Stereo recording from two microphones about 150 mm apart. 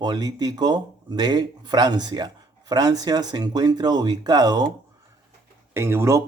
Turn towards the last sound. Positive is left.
turn(degrees=-20)  # may be behind; listen again after turning